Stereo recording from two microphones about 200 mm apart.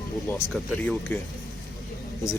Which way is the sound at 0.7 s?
10° left (ahead or behind).